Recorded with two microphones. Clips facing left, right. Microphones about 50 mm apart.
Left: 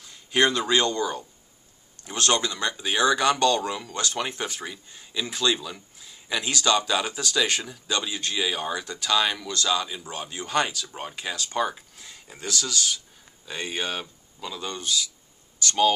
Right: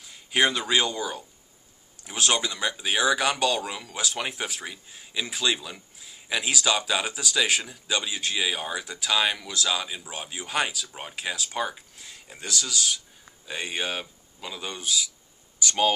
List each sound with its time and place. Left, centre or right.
0.0 s speech: centre